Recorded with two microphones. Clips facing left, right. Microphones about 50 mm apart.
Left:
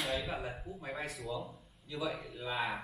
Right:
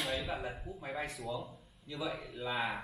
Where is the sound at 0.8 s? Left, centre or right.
Centre.